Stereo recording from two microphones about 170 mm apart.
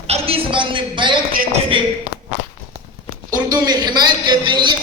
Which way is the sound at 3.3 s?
25° right (ahead or behind).